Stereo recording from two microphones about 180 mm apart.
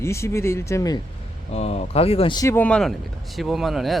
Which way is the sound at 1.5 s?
35° left (ahead or behind).